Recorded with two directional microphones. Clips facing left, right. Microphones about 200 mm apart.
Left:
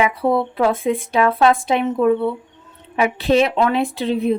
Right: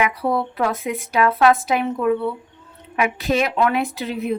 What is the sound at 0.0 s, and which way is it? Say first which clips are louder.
A woman's voice: left 3 dB; 25° left (ahead or behind).